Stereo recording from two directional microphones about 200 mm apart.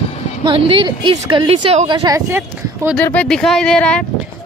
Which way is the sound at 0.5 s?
25° right (ahead or behind).